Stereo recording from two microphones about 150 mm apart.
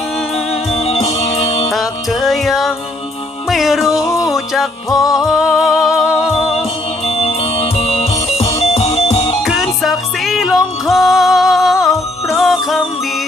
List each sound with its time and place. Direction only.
0.8 s music: 40° left (ahead or behind)
1.7 s music: centre (ahead or behind)
7.0 s music: 40° left (ahead or behind)
9.4 s music: centre (ahead or behind)